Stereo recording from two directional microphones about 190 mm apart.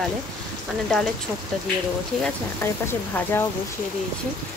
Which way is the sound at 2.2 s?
10° left (ahead or behind).